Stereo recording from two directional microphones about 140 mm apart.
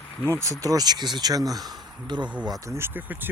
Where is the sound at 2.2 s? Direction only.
10° right (ahead or behind).